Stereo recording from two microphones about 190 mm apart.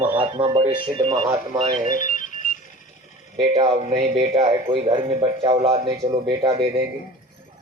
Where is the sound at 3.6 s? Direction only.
35° right (ahead or behind).